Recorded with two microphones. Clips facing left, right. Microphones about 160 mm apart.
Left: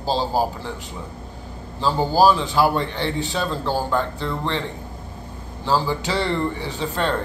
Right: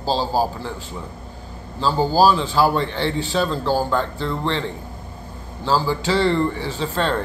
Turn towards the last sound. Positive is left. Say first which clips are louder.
# right 1 dB
turn(degrees=20)  # may be behind; listen again after turning